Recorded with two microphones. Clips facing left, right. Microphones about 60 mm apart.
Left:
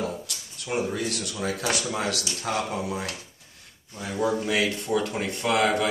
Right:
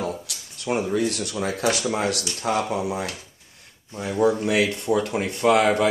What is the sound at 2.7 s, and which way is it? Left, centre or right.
Speech, right.